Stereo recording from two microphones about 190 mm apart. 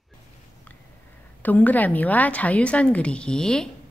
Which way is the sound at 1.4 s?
10° left (ahead or behind).